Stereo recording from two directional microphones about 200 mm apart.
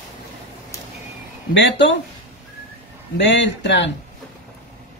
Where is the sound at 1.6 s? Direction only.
65° left (ahead or behind).